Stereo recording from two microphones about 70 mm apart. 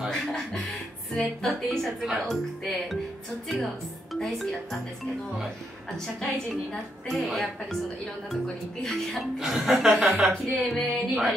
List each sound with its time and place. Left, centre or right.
0.1 s music: centre
1.1 s speech: centre
6.7 s speech: centre
8.8 s speech: centre